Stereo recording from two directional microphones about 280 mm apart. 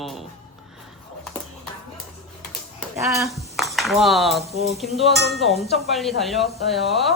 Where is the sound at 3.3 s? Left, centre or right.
Centre.